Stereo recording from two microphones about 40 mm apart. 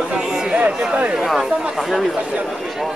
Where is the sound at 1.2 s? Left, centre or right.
Centre.